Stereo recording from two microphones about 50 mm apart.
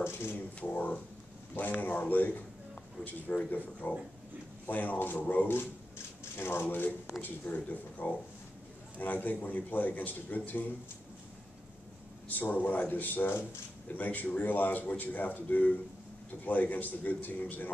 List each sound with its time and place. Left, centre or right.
0.0 s speech: left
0.6 s a man's voice: left
6.3 s a man's voice: left
12.3 s a man's voice: left